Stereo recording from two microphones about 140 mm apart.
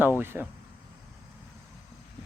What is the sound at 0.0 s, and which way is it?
Speech, 15° right (ahead or behind).